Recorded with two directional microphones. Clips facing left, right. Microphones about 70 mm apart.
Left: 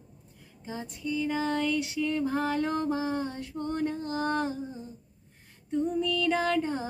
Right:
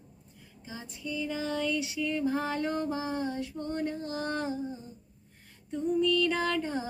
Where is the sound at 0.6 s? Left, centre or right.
Left.